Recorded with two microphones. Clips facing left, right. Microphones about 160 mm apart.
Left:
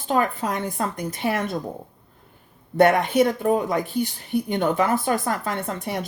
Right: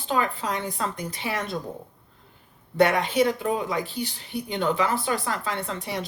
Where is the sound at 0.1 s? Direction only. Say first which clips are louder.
Left 3 dB; 50° left (ahead or behind).